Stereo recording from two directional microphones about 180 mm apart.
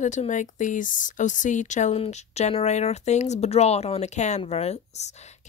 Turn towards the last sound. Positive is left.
turn(degrees=40)  # may be behind; listen again after turning